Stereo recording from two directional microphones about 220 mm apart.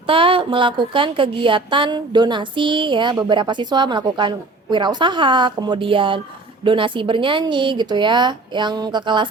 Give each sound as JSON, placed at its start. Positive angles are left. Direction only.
{"t": 0.1, "sound": "a woman's voice", "side_deg": -25}